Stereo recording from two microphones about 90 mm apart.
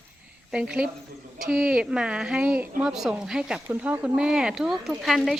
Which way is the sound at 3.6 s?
20° right (ahead or behind).